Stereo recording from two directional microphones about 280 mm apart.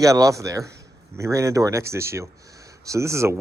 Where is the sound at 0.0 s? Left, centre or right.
Centre.